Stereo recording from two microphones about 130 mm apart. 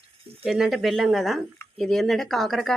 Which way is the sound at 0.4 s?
Centre (ahead or behind).